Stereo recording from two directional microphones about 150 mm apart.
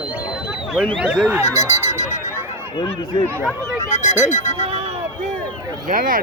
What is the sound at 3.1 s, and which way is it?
Speech, 30° left (ahead or behind).